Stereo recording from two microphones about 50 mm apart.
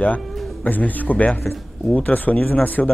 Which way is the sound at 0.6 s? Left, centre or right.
Left.